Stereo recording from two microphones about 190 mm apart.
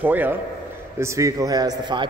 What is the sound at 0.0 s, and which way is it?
A man's voice, 10° right (ahead or behind).